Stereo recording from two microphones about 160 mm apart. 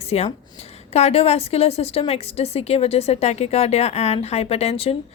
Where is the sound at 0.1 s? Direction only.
40° left (ahead or behind).